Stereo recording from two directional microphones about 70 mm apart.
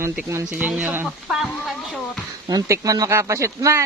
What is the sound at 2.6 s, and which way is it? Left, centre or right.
Speech, right.